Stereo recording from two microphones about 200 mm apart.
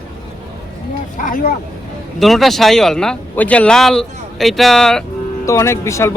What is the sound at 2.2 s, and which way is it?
Speech, centre (ahead or behind).